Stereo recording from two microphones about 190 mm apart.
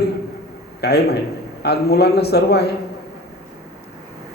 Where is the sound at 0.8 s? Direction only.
60° left (ahead or behind).